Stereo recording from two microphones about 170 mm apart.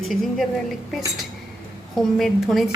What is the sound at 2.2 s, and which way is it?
Speech, centre (ahead or behind).